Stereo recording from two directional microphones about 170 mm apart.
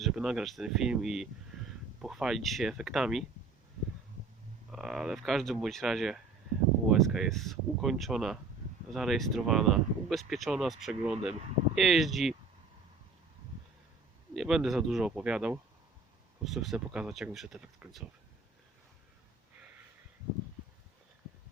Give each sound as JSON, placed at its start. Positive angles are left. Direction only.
{"t": 0.0, "sound": "speech", "side_deg": -5}
{"t": 4.7, "sound": "speech", "side_deg": -5}
{"t": 14.3, "sound": "speech", "side_deg": 0}